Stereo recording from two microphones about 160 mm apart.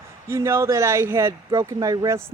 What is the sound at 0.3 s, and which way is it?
Speech, 15° right (ahead or behind).